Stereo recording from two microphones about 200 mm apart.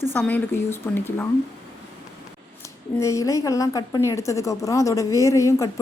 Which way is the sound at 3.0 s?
15° left (ahead or behind).